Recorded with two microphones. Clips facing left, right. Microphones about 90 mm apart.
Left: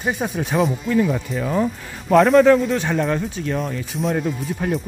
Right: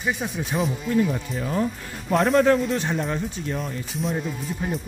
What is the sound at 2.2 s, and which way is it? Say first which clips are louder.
Speech: left 5 dB; 90° left.